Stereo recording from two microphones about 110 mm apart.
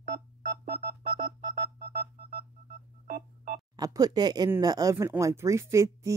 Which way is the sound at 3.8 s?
35° right (ahead or behind).